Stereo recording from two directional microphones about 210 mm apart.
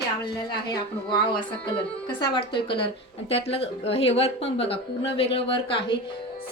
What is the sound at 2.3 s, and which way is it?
Speech, 25° left (ahead or behind).